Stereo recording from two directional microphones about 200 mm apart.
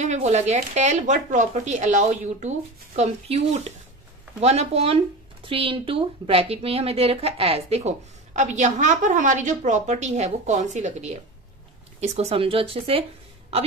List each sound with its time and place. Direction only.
0.1 s speech: 35° right (ahead or behind)